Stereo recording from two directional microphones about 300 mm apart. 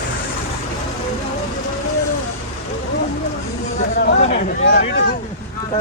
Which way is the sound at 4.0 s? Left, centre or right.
Left.